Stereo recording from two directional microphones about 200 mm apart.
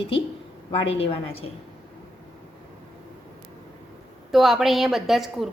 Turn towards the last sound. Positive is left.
turn(degrees=0)  # may be behind; listen again after turning